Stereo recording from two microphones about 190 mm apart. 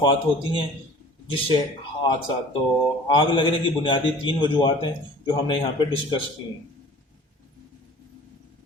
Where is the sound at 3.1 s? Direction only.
25° left (ahead or behind).